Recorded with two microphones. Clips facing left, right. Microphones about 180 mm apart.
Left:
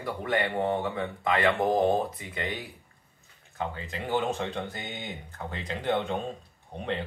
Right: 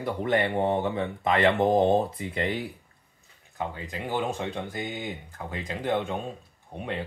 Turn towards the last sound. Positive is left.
turn(degrees=-10)  # may be behind; listen again after turning